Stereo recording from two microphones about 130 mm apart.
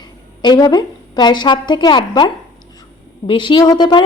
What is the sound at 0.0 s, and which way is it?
A woman's voice, 30° left (ahead or behind).